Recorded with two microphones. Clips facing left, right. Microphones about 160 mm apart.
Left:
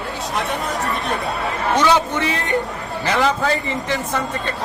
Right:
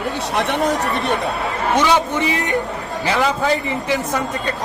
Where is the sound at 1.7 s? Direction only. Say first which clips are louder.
Even; 15° right (ahead or behind).